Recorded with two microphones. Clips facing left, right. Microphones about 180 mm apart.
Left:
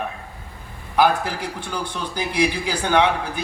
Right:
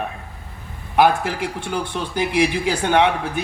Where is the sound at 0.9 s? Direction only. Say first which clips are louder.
Right 2 dB; 25° right (ahead or behind).